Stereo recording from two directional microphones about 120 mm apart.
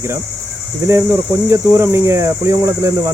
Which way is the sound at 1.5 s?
20° right (ahead or behind).